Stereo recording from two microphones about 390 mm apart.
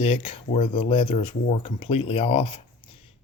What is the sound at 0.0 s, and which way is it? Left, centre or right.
Speech, centre.